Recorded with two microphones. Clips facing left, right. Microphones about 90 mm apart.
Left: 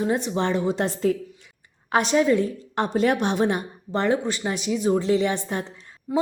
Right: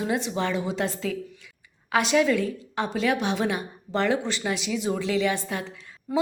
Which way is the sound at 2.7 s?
45° left (ahead or behind).